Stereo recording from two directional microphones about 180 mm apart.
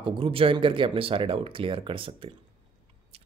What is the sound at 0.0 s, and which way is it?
Speech, 30° right (ahead or behind).